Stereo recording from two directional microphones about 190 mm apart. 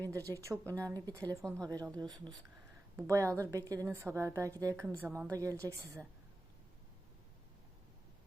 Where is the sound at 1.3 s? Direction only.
15° right (ahead or behind).